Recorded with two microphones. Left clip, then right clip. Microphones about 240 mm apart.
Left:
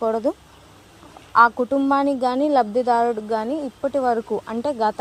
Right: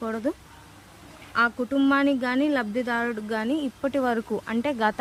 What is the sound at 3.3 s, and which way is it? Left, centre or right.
Speech, centre.